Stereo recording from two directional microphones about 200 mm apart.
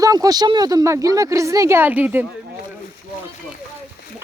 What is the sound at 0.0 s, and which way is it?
Speech, 15° right (ahead or behind).